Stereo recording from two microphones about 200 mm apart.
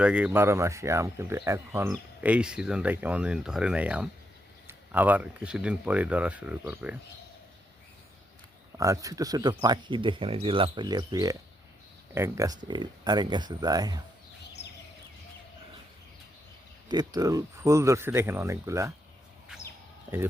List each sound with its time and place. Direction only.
0.0 s speech: 5° right (ahead or behind)
8.8 s speech: 15° right (ahead or behind)
16.9 s speech: 20° right (ahead or behind)